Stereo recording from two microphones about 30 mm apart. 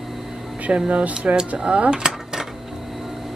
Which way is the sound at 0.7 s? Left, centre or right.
Right.